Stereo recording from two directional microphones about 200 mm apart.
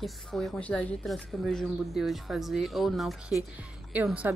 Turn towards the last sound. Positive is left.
turn(degrees=-5)  # may be behind; listen again after turning